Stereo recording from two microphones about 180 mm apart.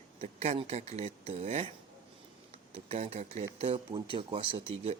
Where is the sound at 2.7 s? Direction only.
35° right (ahead or behind).